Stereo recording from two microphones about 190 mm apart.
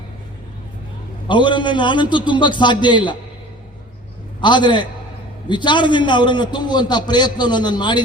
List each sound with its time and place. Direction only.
1.3 s a man's voice: 25° left (ahead or behind)
4.4 s a man's voice: 25° left (ahead or behind)